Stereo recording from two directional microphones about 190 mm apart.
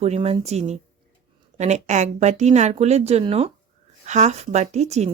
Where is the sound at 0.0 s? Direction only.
35° right (ahead or behind).